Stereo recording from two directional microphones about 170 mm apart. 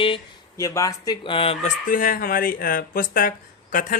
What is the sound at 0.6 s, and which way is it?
Speech, 20° left (ahead or behind).